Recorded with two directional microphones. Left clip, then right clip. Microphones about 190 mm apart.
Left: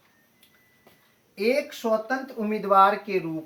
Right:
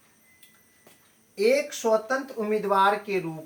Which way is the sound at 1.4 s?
20° right (ahead or behind).